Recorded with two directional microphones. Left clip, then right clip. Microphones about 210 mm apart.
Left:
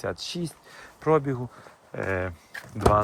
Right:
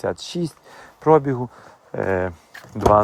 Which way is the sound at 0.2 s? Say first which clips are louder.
Right 5 dB; 90° right.